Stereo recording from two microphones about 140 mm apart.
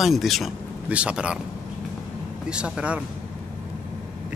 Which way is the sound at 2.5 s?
5° right (ahead or behind).